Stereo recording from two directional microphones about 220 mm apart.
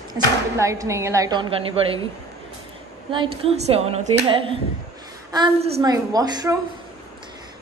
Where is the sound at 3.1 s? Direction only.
25° right (ahead or behind).